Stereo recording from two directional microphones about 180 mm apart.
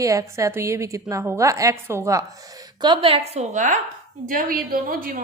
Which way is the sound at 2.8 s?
30° right (ahead or behind).